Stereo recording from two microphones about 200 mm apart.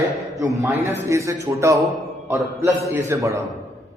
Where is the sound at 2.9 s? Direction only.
15° right (ahead or behind).